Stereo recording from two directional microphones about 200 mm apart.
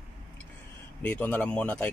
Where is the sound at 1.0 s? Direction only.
5° left (ahead or behind).